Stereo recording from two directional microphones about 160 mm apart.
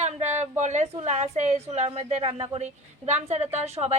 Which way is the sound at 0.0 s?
45° right (ahead or behind).